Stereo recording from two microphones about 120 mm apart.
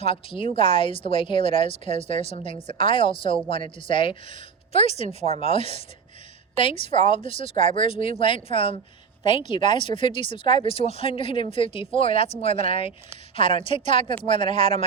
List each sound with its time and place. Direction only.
0.0 s speech: 50° left (ahead or behind)
5.0 s speech: 65° right (ahead or behind)
5.5 s speech: 50° left (ahead or behind)
7.4 s speech: 80° right
7.9 s speech: 50° left (ahead or behind)